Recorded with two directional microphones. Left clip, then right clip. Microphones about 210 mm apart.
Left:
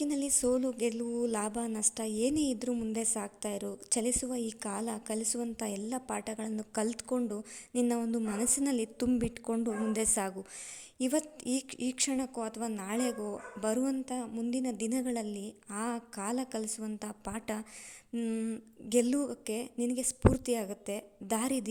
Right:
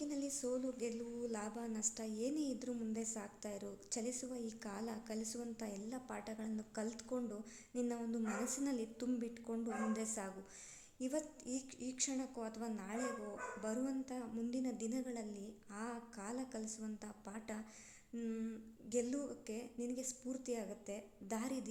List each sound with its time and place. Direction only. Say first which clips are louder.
0.0 s a woman's voice: left 11 dB; 40° left (ahead or behind)